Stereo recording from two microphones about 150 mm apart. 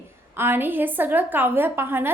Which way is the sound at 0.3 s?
15° right (ahead or behind).